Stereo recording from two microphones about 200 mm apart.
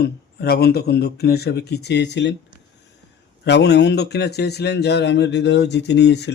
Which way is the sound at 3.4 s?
60° left (ahead or behind).